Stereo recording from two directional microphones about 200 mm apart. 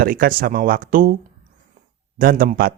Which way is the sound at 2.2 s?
45° right (ahead or behind).